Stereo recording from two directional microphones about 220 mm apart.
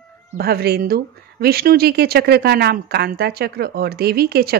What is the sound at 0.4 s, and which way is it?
A woman's voice, 45° right (ahead or behind).